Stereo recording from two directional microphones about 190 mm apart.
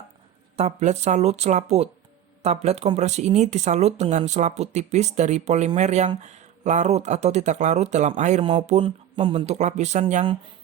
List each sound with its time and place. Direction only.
0.5 s speech: 35° right (ahead or behind)